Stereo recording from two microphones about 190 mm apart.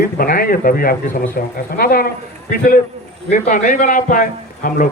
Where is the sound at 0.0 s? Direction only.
50° left (ahead or behind).